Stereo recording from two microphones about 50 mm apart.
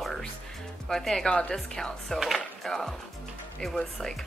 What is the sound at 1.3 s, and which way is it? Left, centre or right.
A woman's voice, left.